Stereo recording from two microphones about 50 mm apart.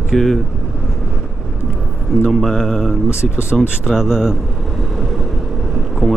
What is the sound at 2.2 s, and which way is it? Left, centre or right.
Speech, centre.